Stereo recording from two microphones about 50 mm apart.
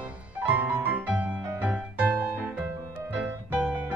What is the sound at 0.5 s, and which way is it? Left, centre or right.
Music, right.